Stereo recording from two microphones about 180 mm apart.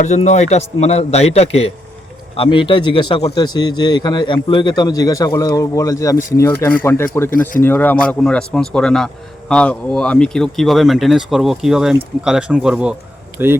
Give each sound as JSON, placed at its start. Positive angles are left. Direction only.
{"t": 0.0, "sound": "a man's voice", "side_deg": 40}
{"t": 7.3, "sound": "speech", "side_deg": 50}
{"t": 7.6, "sound": "speech", "side_deg": 10}